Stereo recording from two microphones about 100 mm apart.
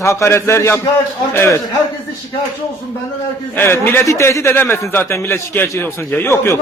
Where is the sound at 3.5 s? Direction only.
20° left (ahead or behind).